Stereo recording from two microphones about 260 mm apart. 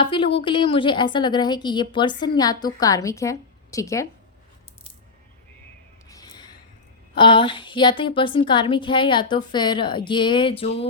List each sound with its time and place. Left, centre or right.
0.0 s a woman's voice: centre
6.1 s a sound: centre
7.2 s a woman's voice: centre